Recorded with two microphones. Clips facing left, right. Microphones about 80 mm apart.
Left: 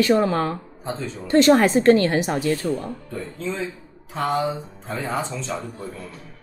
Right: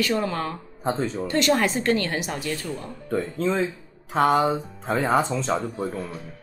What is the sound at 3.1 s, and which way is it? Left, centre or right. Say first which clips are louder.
Mantra: right 8 dB; right.